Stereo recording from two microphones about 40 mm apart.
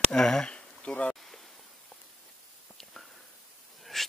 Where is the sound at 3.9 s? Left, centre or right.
Centre.